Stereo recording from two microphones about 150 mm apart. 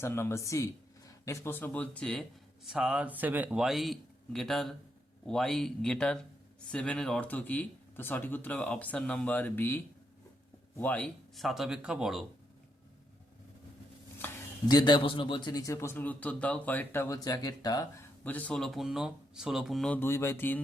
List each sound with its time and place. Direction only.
0.0 s speech: 15° left (ahead or behind)
2.6 s speech: 5° right (ahead or behind)
14.2 s a sound: 15° left (ahead or behind)
14.7 s a man's voice: 30° left (ahead or behind)
18.2 s speech: 10° left (ahead or behind)